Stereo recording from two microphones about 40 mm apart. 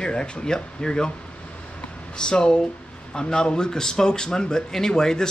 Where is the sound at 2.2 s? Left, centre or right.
Left.